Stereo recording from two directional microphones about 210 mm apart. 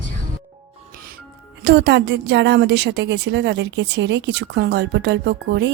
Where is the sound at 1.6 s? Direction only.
55° right (ahead or behind).